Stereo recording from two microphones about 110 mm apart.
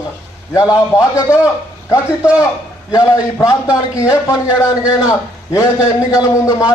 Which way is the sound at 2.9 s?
30° left (ahead or behind).